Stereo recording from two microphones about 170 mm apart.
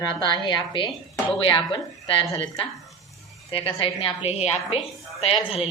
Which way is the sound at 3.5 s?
30° left (ahead or behind).